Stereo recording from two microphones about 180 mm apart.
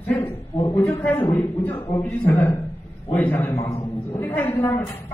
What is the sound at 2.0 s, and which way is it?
A woman's voice, 10° left (ahead or behind).